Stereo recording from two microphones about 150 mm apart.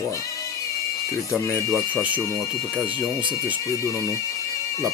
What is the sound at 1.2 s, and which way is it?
Speech, 20° left (ahead or behind).